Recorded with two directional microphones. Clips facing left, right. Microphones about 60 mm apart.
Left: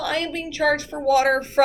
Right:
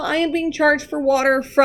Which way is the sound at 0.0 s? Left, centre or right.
Right.